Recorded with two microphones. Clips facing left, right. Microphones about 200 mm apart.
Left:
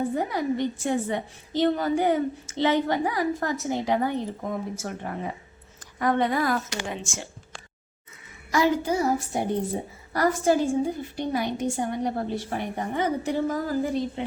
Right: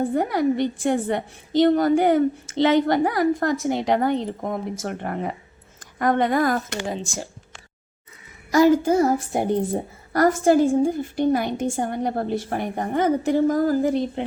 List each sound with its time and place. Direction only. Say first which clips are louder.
0.0 s a woman's voice: right 5 dB; 55° right (ahead or behind)
5.8 s a woman's voice: right 3 dB; 50° right (ahead or behind)
6.8 s speech: right 5 dB; 35° right (ahead or behind)
8.5 s a woman's voice: right 7 dB; 45° right (ahead or behind)